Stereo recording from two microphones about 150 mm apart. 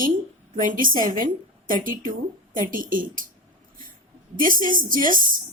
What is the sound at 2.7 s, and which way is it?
Speech, 65° right (ahead or behind).